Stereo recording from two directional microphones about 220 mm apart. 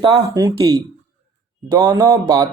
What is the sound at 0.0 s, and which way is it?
Speech, 15° right (ahead or behind).